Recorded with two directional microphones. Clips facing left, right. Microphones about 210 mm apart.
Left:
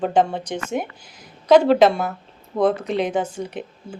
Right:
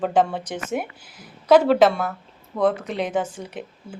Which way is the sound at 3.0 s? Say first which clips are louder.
Left 2 dB; centre (ahead or behind).